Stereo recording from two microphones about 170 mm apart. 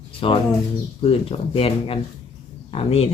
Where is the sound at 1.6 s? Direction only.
35° left (ahead or behind).